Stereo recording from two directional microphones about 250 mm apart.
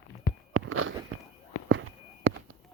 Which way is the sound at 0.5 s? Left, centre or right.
Right.